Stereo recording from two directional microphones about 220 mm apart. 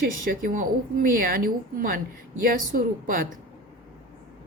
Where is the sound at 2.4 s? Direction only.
40° right (ahead or behind).